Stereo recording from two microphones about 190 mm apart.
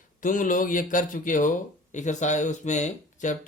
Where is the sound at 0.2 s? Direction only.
45° left (ahead or behind).